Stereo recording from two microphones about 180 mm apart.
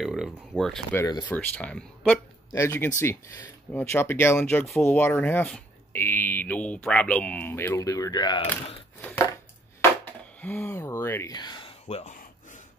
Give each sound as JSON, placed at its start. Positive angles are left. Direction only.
{"t": 0.0, "sound": "speech", "side_deg": -5}
{"t": 0.9, "sound": "speech", "side_deg": 15}
{"t": 9.0, "sound": "chopping", "side_deg": 10}
{"t": 10.4, "sound": "speech", "side_deg": 10}